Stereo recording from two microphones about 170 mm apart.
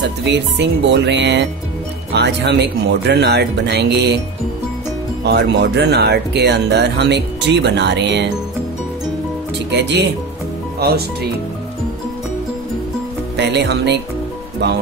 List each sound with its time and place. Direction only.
0.3 s speech: 90° right
5.2 s speech: 75° right (ahead or behind)
9.7 s speech: 90° right
13.4 s speech: 90° right